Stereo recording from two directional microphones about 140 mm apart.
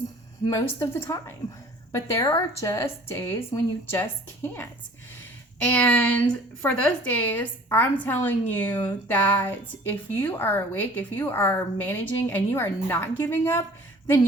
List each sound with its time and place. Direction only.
0.4 s a woman's voice: 20° left (ahead or behind)
5.7 s a woman's voice: 10° left (ahead or behind)